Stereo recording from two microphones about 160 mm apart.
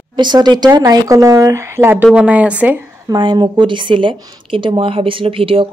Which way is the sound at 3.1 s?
25° right (ahead or behind).